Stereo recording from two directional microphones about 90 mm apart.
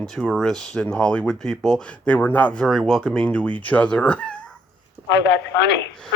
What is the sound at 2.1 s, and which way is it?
Speech, 20° left (ahead or behind).